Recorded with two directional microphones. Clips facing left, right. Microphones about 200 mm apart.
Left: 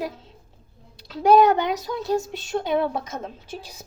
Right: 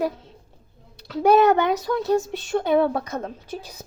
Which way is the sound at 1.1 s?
55° right (ahead or behind).